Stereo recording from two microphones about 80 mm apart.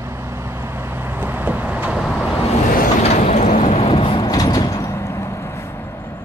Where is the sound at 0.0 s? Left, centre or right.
Right; by 2.0 s centre.